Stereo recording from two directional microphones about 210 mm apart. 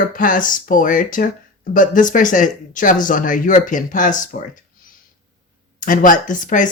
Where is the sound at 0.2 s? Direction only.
40° left (ahead or behind).